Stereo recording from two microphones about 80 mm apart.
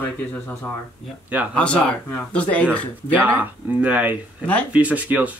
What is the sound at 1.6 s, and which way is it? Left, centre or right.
Speech, centre.